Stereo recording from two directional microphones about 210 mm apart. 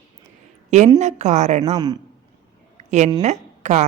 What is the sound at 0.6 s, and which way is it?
Speech, 35° right (ahead or behind).